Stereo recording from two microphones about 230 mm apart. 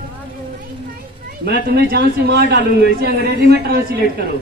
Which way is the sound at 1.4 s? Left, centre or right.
Right.